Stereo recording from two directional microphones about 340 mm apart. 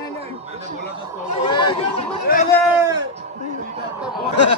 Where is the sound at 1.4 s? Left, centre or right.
Centre.